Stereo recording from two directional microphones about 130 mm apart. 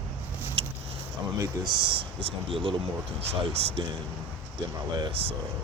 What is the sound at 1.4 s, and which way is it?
Speech, 35° right (ahead or behind).